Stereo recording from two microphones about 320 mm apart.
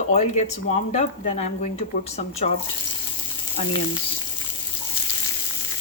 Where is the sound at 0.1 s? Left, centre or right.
Left.